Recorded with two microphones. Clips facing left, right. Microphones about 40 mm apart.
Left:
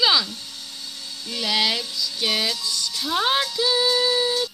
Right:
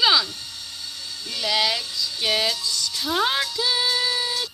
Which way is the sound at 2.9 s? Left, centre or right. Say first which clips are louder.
Even; right.